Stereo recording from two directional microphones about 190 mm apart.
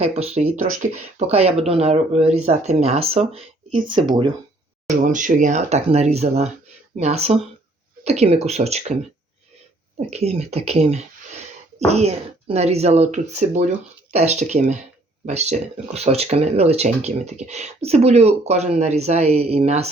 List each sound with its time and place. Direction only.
0.0 s speech: 35° right (ahead or behind)
1.3 s speech: 35° right (ahead or behind)
5.0 s speech: 40° right (ahead or behind)
10.1 s speech: 35° right (ahead or behind)